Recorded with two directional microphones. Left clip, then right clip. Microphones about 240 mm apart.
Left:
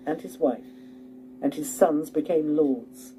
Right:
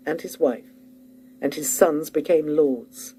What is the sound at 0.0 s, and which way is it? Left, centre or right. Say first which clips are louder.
Speech: right 3 dB; right.